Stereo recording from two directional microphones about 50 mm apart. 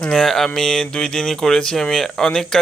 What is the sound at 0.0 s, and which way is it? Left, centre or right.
Speech, centre.